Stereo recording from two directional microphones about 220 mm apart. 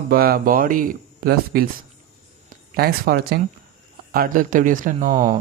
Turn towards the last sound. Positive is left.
turn(degrees=-35)  # may be behind; listen again after turning